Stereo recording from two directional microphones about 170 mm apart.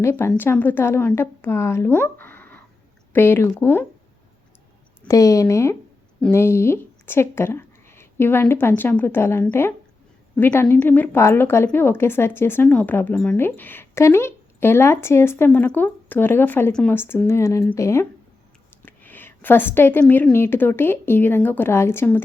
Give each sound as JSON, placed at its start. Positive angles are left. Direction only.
{"t": 0.0, "sound": "a woman's voice", "side_deg": 15}
{"t": 5.0, "sound": "a woman's voice", "side_deg": 20}